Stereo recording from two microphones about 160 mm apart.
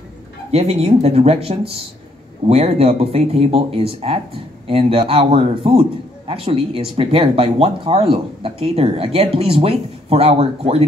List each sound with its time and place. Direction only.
0.5 s speech: 40° right (ahead or behind)